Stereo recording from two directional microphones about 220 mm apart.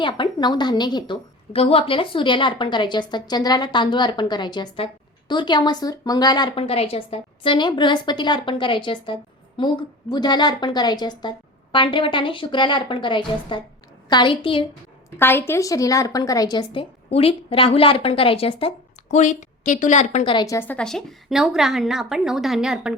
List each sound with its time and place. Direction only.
0.0 s a woman's voice: 20° left (ahead or behind)
15.2 s a woman's voice: 10° left (ahead or behind)